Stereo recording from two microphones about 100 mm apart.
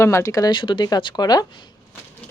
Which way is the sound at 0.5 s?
50° left (ahead or behind).